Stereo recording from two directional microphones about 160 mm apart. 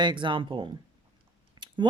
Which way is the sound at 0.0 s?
30° right (ahead or behind).